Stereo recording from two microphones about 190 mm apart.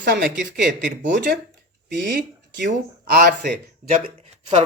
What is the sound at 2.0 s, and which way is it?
Speech, 60° right (ahead or behind).